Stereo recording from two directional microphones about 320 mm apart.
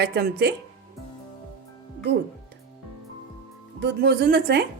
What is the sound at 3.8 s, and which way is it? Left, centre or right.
Speech, right.